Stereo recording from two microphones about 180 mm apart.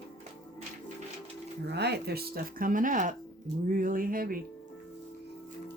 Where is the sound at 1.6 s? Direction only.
65° right (ahead or behind); by 4.4 s 50° right (ahead or behind).